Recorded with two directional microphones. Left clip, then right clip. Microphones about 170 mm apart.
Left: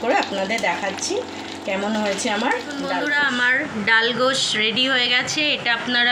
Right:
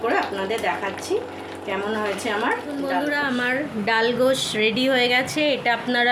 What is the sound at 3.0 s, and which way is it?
Speech, 40° right (ahead or behind).